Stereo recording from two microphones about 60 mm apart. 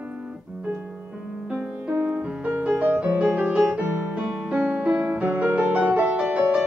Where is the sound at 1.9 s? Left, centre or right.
Right.